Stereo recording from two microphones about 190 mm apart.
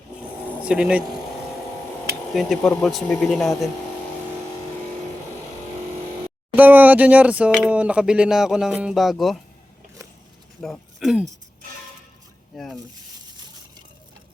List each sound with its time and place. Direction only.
0.6 s speech: 5° right (ahead or behind)
2.3 s speech: centre (ahead or behind)
6.6 s speech: 10° right (ahead or behind)
10.6 s speech: centre (ahead or behind)
12.5 s speech: 5° left (ahead or behind)